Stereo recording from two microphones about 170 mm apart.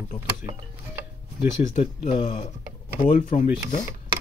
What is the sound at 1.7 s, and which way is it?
Speech, 45° left (ahead or behind).